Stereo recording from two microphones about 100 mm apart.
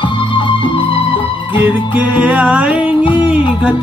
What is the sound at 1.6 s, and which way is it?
Music, 15° right (ahead or behind).